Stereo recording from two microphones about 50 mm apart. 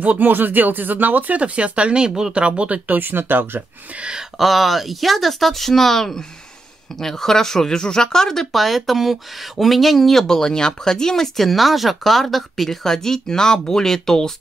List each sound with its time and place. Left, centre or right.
0.0 s speech: right
3.0 s speech: right
3.9 s speech: right
4.2 s speech: centre